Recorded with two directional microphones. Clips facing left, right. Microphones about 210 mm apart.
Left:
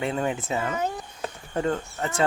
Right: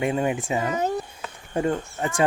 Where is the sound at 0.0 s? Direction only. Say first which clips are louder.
Right 3 dB; 10° right (ahead or behind).